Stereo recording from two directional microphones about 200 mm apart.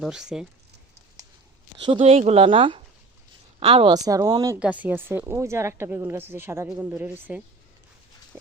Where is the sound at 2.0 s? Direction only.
30° right (ahead or behind); by 7.4 s 10° right (ahead or behind).